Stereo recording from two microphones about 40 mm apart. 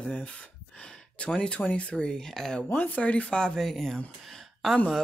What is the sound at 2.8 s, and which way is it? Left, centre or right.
Speech, left.